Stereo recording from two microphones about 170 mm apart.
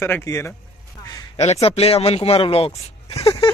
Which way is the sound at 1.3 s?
40° left (ahead or behind).